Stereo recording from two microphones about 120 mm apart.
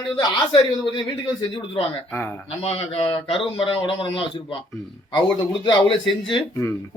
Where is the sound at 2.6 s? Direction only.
55° left (ahead or behind).